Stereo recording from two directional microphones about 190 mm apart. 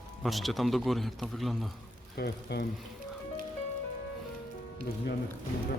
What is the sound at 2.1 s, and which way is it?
Speech, 55° left (ahead or behind).